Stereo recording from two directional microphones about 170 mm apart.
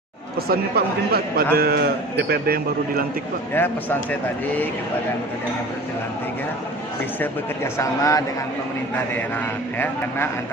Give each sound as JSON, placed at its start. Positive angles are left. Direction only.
{"t": 0.5, "sound": "a man's voice", "side_deg": -65}
{"t": 3.5, "sound": "speech", "side_deg": 10}
{"t": 7.7, "sound": "a man's voice", "side_deg": 20}
{"t": 9.8, "sound": "speech", "side_deg": 15}